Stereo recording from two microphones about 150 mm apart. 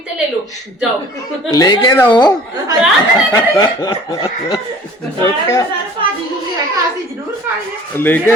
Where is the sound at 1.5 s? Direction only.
25° left (ahead or behind).